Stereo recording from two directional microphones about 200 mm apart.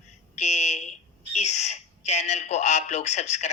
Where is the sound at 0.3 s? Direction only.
35° left (ahead or behind).